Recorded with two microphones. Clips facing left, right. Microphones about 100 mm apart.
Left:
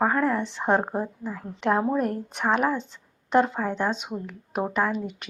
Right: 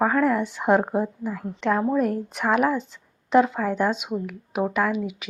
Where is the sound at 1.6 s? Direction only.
10° left (ahead or behind); by 5.2 s 5° right (ahead or behind).